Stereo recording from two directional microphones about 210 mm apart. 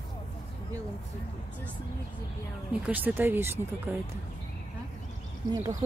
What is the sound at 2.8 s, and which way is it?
Speech, 10° right (ahead or behind).